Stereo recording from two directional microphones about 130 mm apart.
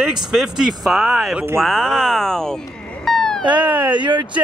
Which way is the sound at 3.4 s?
35° right (ahead or behind).